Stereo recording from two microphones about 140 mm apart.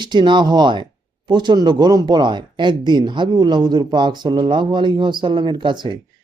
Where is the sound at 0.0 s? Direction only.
35° right (ahead or behind).